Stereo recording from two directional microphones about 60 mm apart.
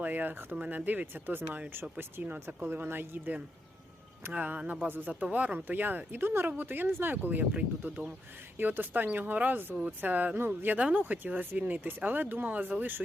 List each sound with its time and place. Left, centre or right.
0.0 s speech: right
2.2 s speech: right
4.3 s speech: right
5.2 s speech: right